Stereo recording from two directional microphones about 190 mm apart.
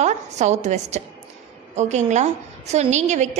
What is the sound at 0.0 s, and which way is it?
A woman's voice, 35° right (ahead or behind).